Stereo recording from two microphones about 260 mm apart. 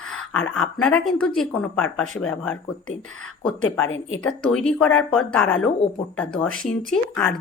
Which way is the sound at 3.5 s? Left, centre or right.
Left.